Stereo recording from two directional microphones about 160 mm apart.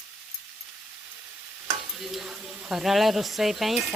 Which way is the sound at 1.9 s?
Centre (ahead or behind).